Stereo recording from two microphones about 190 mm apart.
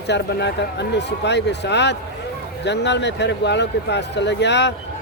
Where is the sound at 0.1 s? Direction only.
65° left (ahead or behind).